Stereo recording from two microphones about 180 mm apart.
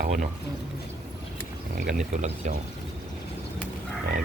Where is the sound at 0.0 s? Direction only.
50° right (ahead or behind).